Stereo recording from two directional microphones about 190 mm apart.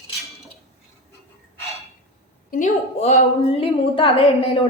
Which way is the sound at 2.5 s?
40° left (ahead or behind).